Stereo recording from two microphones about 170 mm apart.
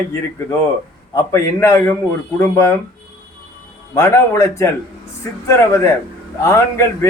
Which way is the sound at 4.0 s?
15° left (ahead or behind).